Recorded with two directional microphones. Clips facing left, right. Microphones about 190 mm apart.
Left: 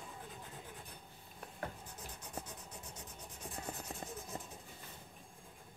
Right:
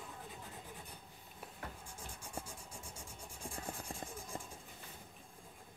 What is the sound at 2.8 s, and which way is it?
Vehicle, 10° right (ahead or behind).